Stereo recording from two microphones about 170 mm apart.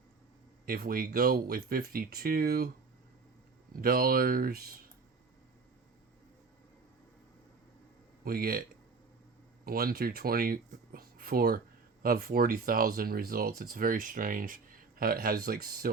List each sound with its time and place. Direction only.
0.6 s speech: 60° right (ahead or behind)
3.8 s speech: 60° right (ahead or behind)
8.2 s speech: 60° right (ahead or behind)
9.6 s speech: 60° right (ahead or behind)